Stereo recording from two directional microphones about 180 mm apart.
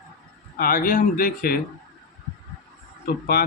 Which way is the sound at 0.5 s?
55° left (ahead or behind).